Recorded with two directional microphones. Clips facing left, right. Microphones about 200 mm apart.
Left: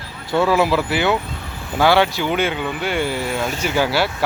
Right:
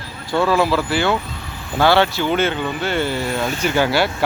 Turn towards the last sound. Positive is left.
turn(degrees=5)  # may be behind; listen again after turning